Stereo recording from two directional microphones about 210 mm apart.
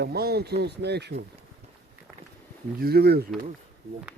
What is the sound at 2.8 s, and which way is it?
Speech, 50° right (ahead or behind).